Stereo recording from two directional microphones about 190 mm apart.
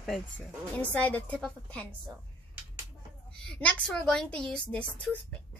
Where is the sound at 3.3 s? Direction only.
5° left (ahead or behind).